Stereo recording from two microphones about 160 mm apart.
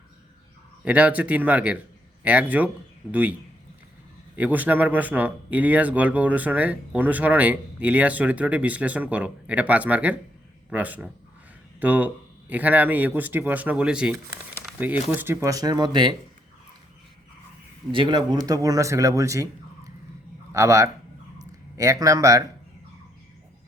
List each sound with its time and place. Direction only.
0.9 s speech: 10° right (ahead or behind)
4.4 s speech: 10° right (ahead or behind); by 16.1 s 30° right (ahead or behind)
17.9 s speech: 30° right (ahead or behind)